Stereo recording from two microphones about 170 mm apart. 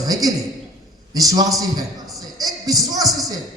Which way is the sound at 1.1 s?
20° right (ahead or behind).